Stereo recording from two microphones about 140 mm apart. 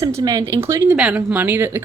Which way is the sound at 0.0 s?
25° right (ahead or behind).